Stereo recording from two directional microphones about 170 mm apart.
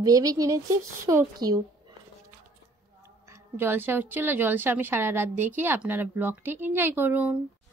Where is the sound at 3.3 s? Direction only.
15° right (ahead or behind).